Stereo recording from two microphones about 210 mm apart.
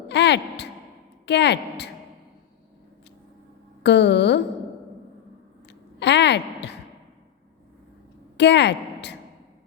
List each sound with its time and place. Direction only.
0.1 s a woman's voice: 55° left (ahead or behind)
3.8 s speech: 55° left (ahead or behind)
5.6 s a sound: 55° left (ahead or behind)
8.4 s speech: 55° left (ahead or behind)